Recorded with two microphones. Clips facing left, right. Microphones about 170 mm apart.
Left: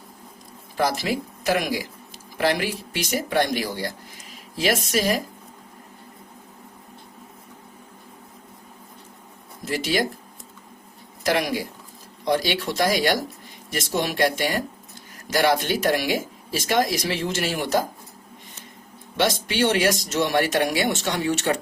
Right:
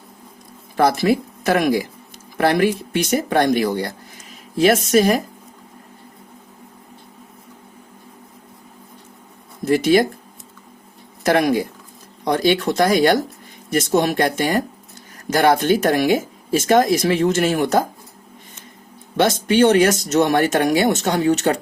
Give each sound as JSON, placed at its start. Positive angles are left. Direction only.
{"t": 0.8, "sound": "speech", "side_deg": -50}
{"t": 9.6, "sound": "speech", "side_deg": -50}
{"t": 11.3, "sound": "speech", "side_deg": -50}
{"t": 19.2, "sound": "speech", "side_deg": -45}